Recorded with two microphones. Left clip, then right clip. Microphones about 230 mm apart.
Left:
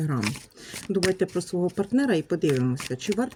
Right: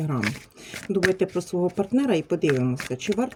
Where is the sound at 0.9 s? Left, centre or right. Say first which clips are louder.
Right 2 dB; centre.